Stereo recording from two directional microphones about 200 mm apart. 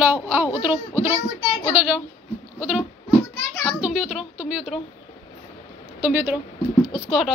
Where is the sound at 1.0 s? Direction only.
25° left (ahead or behind).